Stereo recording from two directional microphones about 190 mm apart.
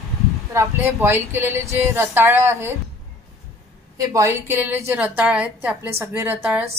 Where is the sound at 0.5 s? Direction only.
15° right (ahead or behind).